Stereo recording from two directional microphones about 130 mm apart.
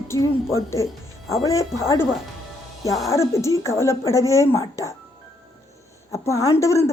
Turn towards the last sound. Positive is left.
turn(degrees=20)  # may be behind; listen again after turning